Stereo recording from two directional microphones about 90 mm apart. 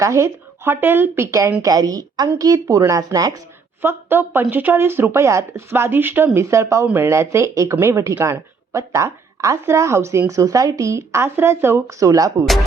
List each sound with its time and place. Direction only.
0.0 s speech: 30° right (ahead or behind)
1.6 s a woman's voice: 45° right (ahead or behind)
3.8 s speech: 25° right (ahead or behind)
6.8 s speech: 25° right (ahead or behind); by 12.5 s 40° right (ahead or behind)